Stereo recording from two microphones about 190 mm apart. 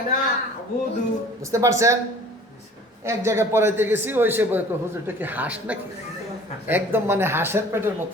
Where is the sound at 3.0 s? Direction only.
15° right (ahead or behind).